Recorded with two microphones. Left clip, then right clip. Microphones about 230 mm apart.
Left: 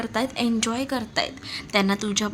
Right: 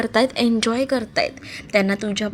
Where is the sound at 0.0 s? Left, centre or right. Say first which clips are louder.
Right 7 dB; right.